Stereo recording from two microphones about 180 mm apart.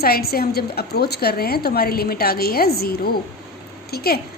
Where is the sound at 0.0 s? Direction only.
60° left (ahead or behind).